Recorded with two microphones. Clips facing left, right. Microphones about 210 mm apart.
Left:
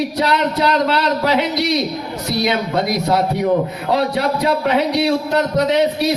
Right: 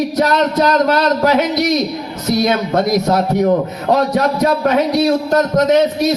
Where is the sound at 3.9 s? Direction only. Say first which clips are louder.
Right 4 dB; 45° right (ahead or behind).